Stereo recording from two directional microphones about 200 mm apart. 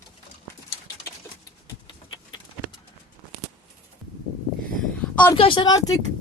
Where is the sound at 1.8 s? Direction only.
20° left (ahead or behind).